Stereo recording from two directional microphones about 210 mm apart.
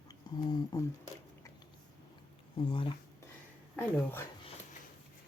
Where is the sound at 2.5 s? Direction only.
25° left (ahead or behind).